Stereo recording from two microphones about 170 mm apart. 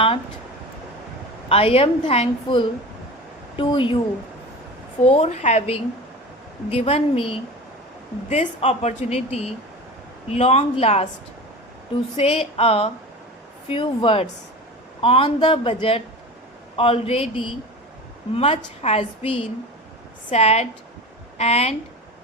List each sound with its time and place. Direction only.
1.5 s a woman's voice: 35° left (ahead or behind)
5.0 s a woman's voice: 40° left (ahead or behind)
12.1 s a woman's voice: 35° left (ahead or behind)
18.3 s a woman's voice: 35° left (ahead or behind)